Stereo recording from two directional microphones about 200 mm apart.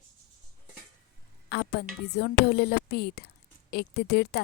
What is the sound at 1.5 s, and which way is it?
A woman's voice, 55° left (ahead or behind).